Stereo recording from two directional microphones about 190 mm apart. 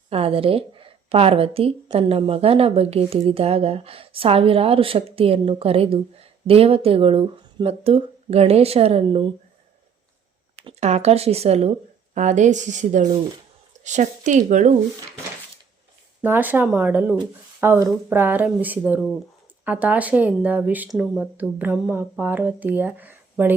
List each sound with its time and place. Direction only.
0.1 s a woman's voice: 30° right (ahead or behind)
10.6 s a woman's voice: 35° right (ahead or behind)
16.2 s speech: 10° right (ahead or behind)